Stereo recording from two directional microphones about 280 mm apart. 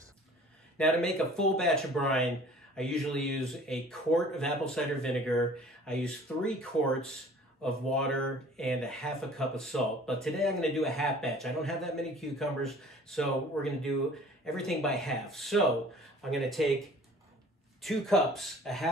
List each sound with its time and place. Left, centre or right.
0.7 s speech: centre
17.8 s speech: centre